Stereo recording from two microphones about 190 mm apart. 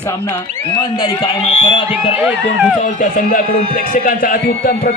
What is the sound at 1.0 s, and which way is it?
Speech, 30° left (ahead or behind).